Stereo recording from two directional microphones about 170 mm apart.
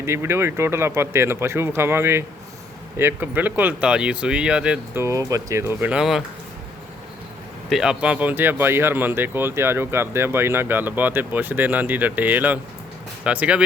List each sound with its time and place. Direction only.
0.0 s speech: 15° right (ahead or behind)
5.0 s speech: 20° right (ahead or behind); by 6.2 s 5° right (ahead or behind)
7.7 s speech: 5° right (ahead or behind)